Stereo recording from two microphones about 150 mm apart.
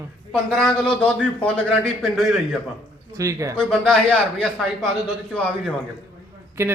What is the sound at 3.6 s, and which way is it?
A man's voice, 5° left (ahead or behind).